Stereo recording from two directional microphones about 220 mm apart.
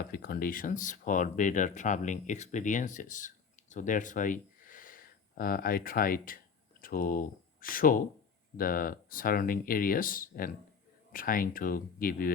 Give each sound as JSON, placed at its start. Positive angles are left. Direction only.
{"t": 0.0, "sound": "speech", "side_deg": 45}